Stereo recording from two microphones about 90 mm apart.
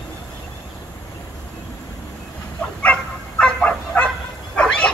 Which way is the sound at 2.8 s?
15° left (ahead or behind).